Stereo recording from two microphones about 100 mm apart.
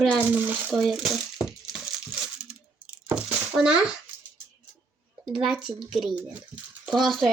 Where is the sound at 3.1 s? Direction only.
10° right (ahead or behind).